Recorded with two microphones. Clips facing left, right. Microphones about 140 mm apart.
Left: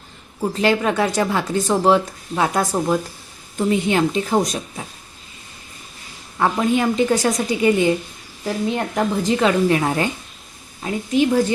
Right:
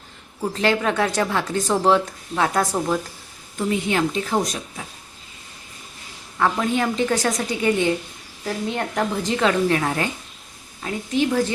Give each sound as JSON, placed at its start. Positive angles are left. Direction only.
{"t": 0.5, "sound": "a woman's voice", "side_deg": 5}
{"t": 6.4, "sound": "a woman's voice", "side_deg": 20}